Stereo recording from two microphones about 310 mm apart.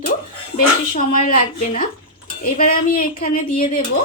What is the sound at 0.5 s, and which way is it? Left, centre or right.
Speech, left.